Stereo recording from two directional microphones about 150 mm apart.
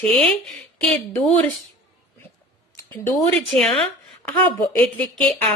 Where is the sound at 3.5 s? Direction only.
Centre (ahead or behind).